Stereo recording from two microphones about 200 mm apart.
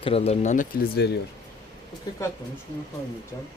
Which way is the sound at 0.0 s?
30° left (ahead or behind).